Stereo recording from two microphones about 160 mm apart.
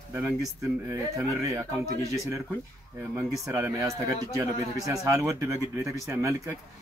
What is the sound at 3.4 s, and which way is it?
Speech, 15° right (ahead or behind).